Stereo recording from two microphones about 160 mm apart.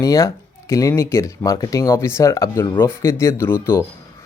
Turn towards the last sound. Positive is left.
turn(degrees=15)  # may be behind; listen again after turning